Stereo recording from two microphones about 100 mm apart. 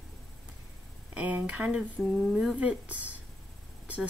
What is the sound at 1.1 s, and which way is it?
A woman's voice, 15° right (ahead or behind).